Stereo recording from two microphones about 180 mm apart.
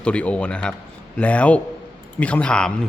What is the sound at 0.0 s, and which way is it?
Speech, 5° left (ahead or behind).